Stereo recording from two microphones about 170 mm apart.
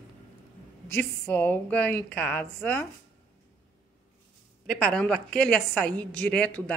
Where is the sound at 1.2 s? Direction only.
10° left (ahead or behind).